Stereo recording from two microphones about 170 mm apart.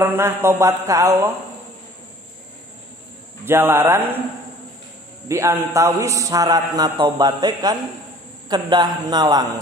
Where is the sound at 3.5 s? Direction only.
15° right (ahead or behind).